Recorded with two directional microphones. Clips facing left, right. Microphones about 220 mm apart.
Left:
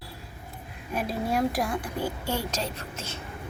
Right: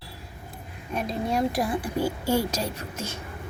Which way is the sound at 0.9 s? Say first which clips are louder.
Right 1 dB; 5° left (ahead or behind).